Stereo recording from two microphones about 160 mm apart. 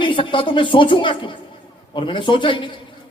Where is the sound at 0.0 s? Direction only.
30° left (ahead or behind).